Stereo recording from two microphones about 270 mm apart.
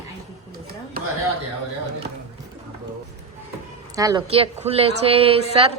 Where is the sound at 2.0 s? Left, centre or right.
Right.